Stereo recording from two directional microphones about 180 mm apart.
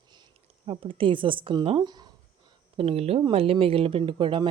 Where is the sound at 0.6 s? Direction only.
30° right (ahead or behind).